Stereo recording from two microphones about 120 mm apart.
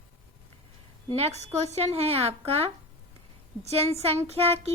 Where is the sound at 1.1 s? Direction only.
60° right (ahead or behind).